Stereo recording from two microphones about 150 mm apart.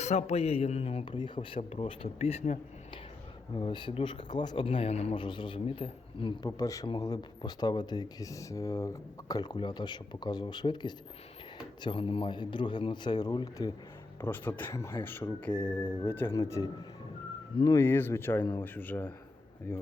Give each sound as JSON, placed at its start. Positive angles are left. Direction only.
{"t": 0.0, "sound": "speech", "side_deg": 45}
{"t": 3.5, "sound": "a man's voice", "side_deg": 30}
{"t": 15.6, "sound": "a man's voice", "side_deg": 35}
{"t": 16.0, "sound": "speech", "side_deg": 15}